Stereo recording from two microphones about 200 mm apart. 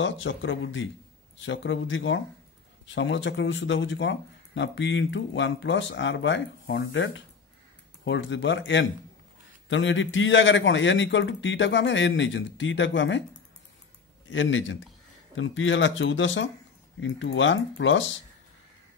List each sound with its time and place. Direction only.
0.0 s speech: 65° left (ahead or behind)
14.3 s speech: 70° left (ahead or behind)